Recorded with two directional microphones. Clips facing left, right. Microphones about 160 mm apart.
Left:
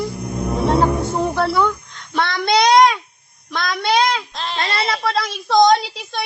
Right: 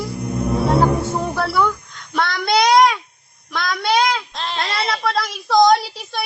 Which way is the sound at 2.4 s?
Centre (ahead or behind).